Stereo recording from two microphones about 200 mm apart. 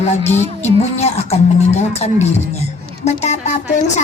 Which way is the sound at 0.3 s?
35° left (ahead or behind).